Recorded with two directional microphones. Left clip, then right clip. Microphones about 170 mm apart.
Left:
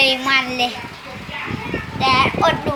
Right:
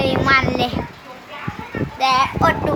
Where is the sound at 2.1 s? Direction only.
5° right (ahead or behind).